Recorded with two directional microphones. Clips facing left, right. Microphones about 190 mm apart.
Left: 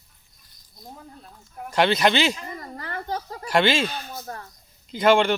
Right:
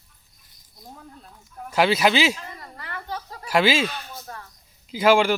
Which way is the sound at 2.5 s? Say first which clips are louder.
Left 4 dB; 40° left (ahead or behind).